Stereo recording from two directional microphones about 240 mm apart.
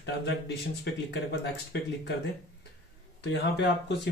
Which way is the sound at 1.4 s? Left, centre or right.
Left.